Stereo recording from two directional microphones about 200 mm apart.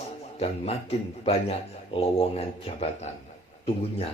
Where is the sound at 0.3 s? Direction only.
30° left (ahead or behind).